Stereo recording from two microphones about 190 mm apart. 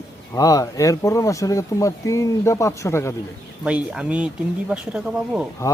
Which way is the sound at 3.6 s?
5° right (ahead or behind).